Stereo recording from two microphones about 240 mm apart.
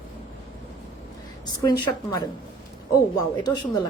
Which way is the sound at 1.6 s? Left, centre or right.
Centre.